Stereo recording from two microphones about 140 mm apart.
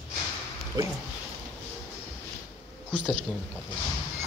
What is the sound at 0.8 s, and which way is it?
Speech, 30° right (ahead or behind).